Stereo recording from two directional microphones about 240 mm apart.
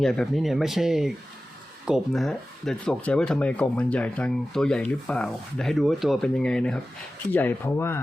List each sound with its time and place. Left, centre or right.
0.0 s speech: centre